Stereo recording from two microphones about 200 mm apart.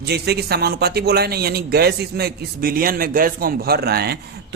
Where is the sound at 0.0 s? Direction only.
55° right (ahead or behind).